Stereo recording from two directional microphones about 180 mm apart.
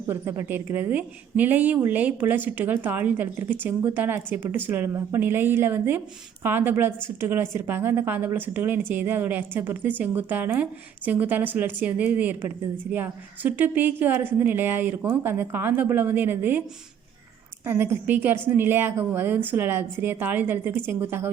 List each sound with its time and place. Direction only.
0.1 s a woman's voice: 15° right (ahead or behind)
17.7 s a woman's voice: 15° right (ahead or behind)